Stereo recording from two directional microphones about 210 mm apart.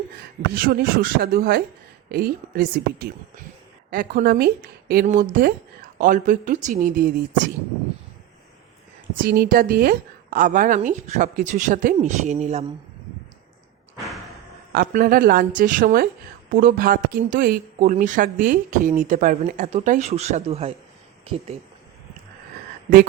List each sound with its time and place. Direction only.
0.2 s a woman's voice: 45° right (ahead or behind)
9.2 s speech: 45° right (ahead or behind)
14.7 s a woman's voice: 45° right (ahead or behind); by 21.6 s 30° right (ahead or behind)